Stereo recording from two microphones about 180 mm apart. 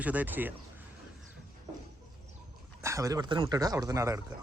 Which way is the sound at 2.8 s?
15° right (ahead or behind).